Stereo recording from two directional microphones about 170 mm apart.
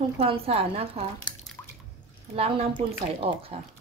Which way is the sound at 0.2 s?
35° right (ahead or behind).